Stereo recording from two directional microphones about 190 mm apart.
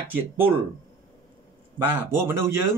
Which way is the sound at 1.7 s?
10° right (ahead or behind).